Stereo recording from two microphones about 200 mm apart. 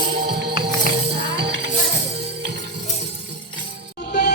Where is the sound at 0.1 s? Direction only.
50° right (ahead or behind).